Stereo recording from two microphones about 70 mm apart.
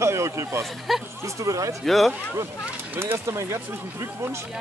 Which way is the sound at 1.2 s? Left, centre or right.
Right.